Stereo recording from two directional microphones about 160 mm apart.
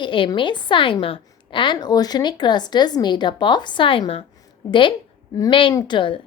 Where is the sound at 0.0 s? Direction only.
30° left (ahead or behind).